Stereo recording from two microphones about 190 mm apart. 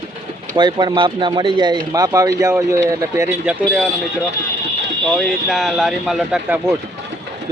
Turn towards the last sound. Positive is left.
turn(degrees=-5)  # may be behind; listen again after turning